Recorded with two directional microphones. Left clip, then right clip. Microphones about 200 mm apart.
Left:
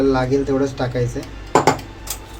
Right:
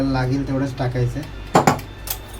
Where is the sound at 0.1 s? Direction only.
30° left (ahead or behind).